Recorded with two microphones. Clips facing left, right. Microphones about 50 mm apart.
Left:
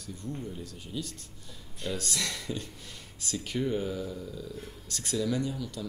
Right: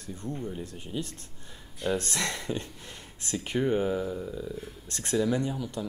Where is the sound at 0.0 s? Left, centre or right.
Right.